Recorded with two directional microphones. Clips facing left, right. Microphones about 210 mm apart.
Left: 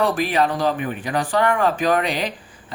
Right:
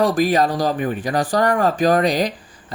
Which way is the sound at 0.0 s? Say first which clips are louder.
Right 3 dB; 40° right (ahead or behind).